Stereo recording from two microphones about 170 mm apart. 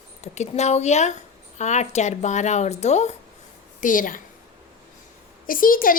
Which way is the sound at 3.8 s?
50° left (ahead or behind).